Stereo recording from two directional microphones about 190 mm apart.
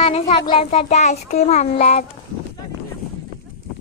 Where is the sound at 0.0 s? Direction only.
35° left (ahead or behind).